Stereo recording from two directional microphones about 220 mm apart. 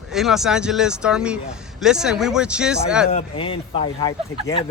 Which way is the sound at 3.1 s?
25° left (ahead or behind).